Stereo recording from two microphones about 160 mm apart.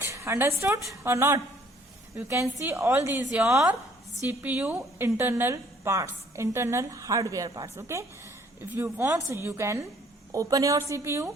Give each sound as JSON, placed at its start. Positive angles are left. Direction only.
{"t": 0.0, "sound": "a woman's voice", "side_deg": -20}